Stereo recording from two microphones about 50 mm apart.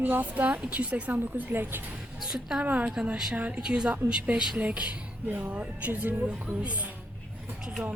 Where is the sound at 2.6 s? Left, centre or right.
Right.